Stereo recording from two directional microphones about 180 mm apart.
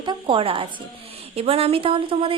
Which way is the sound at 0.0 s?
25° right (ahead or behind).